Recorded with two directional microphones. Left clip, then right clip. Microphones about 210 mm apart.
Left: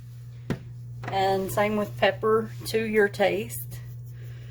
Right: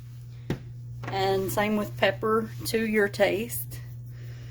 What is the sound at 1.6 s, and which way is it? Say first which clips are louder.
Speech: left 4 dB; 50° right (ahead or behind).